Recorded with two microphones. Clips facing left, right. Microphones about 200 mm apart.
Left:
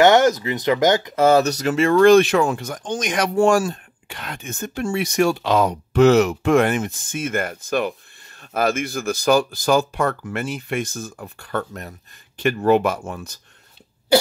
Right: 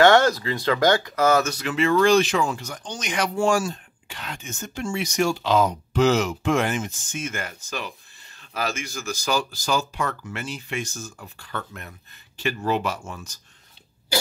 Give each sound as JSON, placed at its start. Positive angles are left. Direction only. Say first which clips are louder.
{"t": 0.0, "sound": "speech", "louder": "left 2 dB", "side_deg": 15}